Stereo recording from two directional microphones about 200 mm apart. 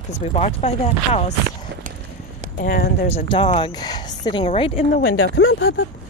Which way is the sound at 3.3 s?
25° left (ahead or behind).